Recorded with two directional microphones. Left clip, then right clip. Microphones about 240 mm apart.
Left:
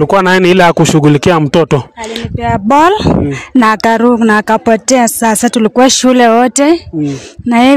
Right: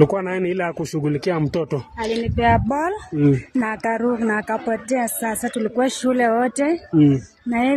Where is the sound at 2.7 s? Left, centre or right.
Left.